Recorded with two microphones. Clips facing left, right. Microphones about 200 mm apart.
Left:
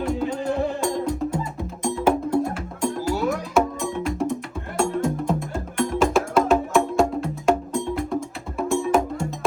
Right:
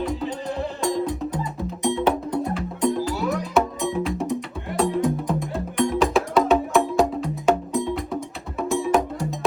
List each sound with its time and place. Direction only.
0.0 s music: centre (ahead or behind)